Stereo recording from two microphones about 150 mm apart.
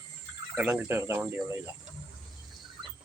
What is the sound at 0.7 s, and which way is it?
Speech, 15° right (ahead or behind).